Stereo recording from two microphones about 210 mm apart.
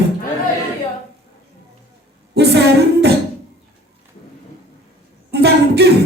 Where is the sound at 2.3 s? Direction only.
50° right (ahead or behind).